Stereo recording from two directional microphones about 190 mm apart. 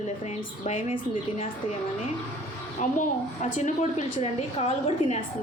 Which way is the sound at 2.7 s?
40° left (ahead or behind).